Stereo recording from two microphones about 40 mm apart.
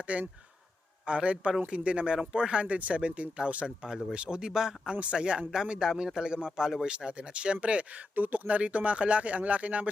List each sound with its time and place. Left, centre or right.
0.1 s speech: right; by 6.8 s centre
6.8 s speech: right
8.1 s speech: right